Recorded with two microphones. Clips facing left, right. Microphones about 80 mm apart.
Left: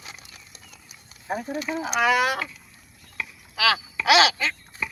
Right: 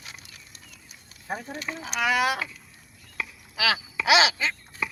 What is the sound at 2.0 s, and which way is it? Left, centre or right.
Speech, centre.